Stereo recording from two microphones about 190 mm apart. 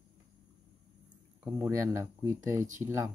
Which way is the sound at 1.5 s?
15° right (ahead or behind).